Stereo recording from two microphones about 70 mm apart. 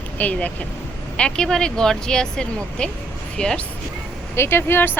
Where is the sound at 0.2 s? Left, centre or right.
Left.